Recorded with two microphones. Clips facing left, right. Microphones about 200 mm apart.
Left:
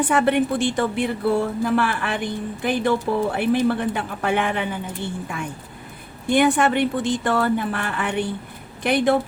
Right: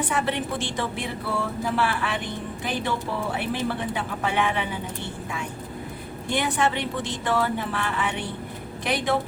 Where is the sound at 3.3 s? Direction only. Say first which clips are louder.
Left 8 dB; 55° left (ahead or behind).